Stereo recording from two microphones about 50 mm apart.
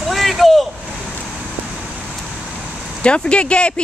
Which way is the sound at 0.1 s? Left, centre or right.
Centre.